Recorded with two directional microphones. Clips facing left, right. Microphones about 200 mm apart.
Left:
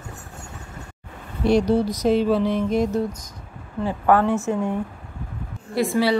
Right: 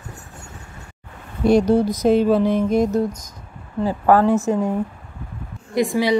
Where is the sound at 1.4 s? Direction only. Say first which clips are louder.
Right 3 dB; 50° right (ahead or behind).